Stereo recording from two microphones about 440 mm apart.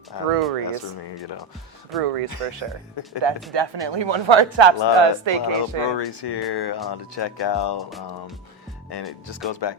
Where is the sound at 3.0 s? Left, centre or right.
Left.